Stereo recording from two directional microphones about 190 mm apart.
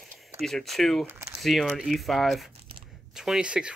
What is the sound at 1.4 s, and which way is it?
Speech, centre (ahead or behind).